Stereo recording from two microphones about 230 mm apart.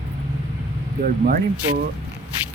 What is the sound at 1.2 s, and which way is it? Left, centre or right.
Speech, right.